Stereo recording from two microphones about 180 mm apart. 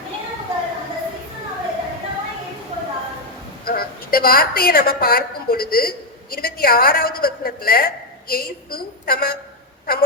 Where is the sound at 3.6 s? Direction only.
55° left (ahead or behind).